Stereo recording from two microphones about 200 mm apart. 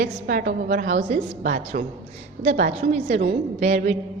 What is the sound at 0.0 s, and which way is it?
A woman's voice, 45° right (ahead or behind).